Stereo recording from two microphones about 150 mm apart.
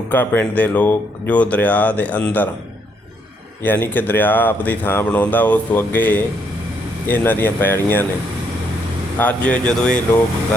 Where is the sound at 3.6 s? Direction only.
10° left (ahead or behind).